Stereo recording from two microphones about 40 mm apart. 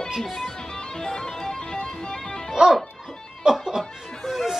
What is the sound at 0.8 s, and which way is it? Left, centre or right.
Music, centre.